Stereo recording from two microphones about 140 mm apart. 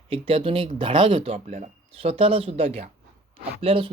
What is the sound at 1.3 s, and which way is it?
Speech, 55° right (ahead or behind).